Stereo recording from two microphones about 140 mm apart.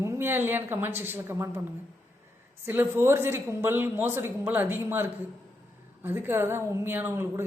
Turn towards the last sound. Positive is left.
turn(degrees=-15)  # may be behind; listen again after turning